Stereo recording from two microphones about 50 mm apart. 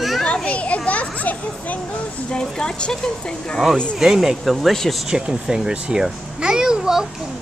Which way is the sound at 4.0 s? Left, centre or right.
Centre.